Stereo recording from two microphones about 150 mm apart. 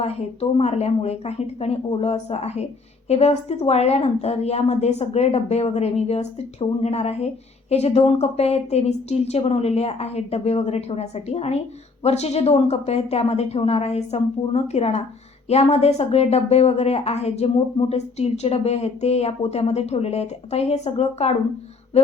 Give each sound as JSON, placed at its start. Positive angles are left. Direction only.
{"t": 0.0, "sound": "a woman's voice", "side_deg": 45}